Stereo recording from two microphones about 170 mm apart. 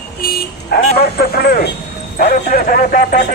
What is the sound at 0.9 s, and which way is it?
Speech, 65° left (ahead or behind).